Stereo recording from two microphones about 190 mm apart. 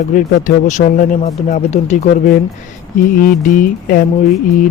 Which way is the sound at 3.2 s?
45° left (ahead or behind).